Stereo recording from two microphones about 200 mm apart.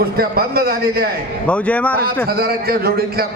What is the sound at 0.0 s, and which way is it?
Speech, 50° right (ahead or behind).